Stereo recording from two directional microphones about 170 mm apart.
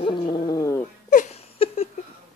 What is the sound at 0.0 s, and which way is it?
Dog, 30° left (ahead or behind).